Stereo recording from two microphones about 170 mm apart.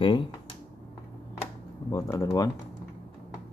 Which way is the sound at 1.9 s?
20° left (ahead or behind).